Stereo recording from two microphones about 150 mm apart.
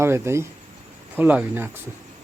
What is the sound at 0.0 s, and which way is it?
Speech, 15° right (ahead or behind).